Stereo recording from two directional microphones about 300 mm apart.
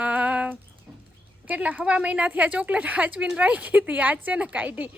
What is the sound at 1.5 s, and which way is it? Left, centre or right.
Speech, centre.